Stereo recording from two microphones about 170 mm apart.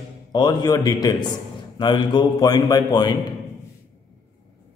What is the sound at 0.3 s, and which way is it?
A man's voice, 25° left (ahead or behind).